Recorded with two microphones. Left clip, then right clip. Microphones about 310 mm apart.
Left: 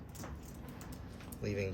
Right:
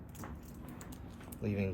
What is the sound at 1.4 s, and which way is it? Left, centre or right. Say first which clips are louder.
Speech: even; right.